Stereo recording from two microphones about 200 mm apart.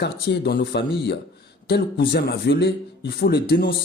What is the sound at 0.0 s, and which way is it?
A man's voice, 55° left (ahead or behind).